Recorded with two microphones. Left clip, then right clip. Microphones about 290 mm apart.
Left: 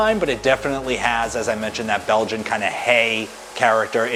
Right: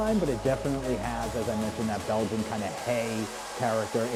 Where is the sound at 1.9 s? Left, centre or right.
Centre.